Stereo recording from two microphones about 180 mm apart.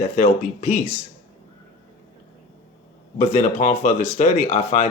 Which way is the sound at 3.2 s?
40° left (ahead or behind).